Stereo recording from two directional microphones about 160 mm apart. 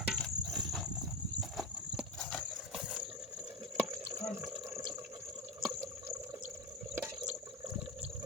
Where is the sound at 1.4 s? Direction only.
Centre (ahead or behind).